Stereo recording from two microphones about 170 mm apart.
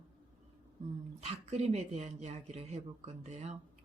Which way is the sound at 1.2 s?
40° right (ahead or behind).